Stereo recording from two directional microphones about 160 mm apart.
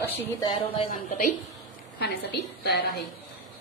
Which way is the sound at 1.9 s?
90° left.